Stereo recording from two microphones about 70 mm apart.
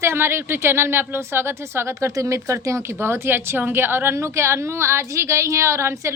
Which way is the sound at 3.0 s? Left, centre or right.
Right.